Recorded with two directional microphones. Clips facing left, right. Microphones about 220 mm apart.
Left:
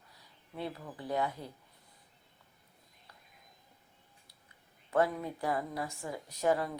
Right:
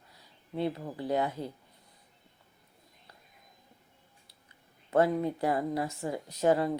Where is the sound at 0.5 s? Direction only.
35° right (ahead or behind).